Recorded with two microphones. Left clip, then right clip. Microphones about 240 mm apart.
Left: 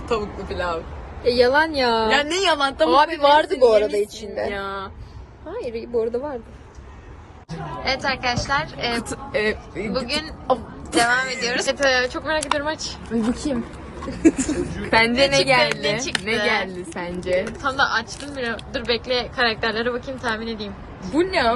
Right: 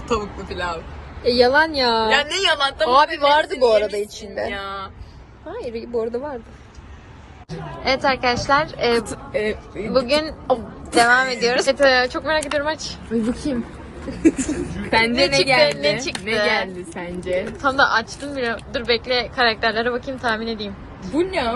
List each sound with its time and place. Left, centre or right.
0.1 s a woman's voice: centre
1.2 s speech: centre
2.0 s a woman's voice: left
3.2 s speech: centre
4.5 s speech: left
5.5 s speech: centre
7.5 s a woman's voice: centre
13.1 s a woman's voice: centre
17.6 s speech: centre
21.2 s a woman's voice: centre